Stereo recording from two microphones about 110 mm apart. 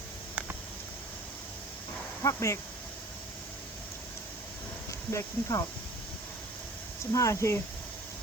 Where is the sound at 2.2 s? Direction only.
30° left (ahead or behind).